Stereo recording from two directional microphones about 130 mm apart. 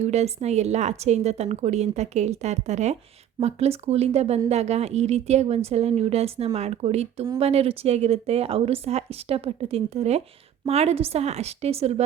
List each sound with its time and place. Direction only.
0.0 s a woman's voice: 55° right (ahead or behind)